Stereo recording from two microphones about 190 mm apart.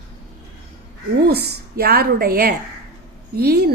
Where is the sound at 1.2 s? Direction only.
55° right (ahead or behind).